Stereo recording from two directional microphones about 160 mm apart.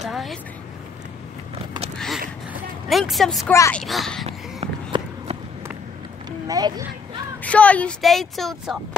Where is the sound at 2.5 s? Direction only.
Centre (ahead or behind).